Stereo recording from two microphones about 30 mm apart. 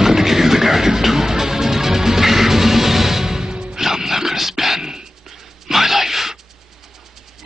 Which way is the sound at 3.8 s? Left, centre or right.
Centre.